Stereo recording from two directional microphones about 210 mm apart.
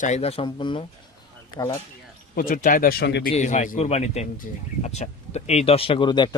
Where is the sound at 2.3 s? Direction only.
40° left (ahead or behind).